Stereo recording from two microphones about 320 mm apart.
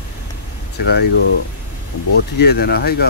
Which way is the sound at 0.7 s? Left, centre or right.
Left.